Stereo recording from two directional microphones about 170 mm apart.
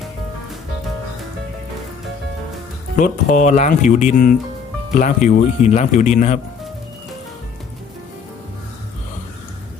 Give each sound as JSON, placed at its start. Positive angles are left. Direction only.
{"t": 2.9, "sound": "speech", "side_deg": 50}